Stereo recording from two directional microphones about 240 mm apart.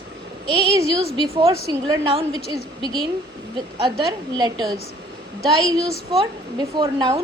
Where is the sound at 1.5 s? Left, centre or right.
Centre.